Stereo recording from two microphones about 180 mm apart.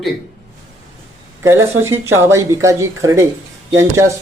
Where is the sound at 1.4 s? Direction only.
15° right (ahead or behind).